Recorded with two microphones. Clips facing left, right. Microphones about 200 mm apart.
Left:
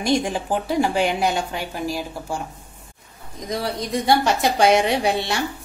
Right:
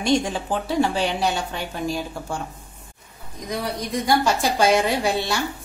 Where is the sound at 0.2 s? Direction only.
10° left (ahead or behind).